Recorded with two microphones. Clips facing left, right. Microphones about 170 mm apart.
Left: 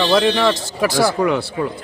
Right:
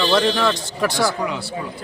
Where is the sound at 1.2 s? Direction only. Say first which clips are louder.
Left 7 dB; 60° left (ahead or behind).